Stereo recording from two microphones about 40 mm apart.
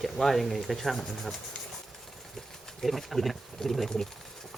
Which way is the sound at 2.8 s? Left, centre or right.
Centre.